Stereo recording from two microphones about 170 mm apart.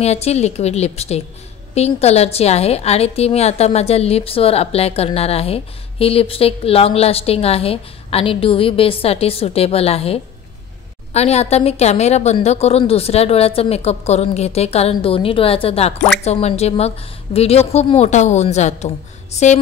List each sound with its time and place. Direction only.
0.0 s a woman's voice: 40° left (ahead or behind)